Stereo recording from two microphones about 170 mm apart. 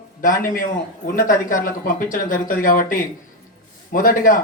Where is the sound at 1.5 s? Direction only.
55° left (ahead or behind).